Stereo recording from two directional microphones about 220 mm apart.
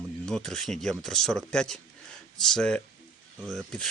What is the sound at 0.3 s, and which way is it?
Speech, centre (ahead or behind).